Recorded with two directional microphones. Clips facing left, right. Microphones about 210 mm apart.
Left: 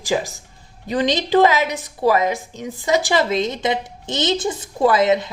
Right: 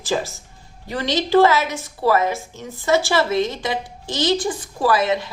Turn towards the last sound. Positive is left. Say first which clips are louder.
# left 3 dB
turn(degrees=20)  # may be behind; listen again after turning